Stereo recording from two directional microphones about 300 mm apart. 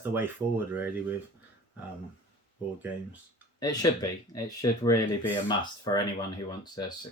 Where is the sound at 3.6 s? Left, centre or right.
Centre.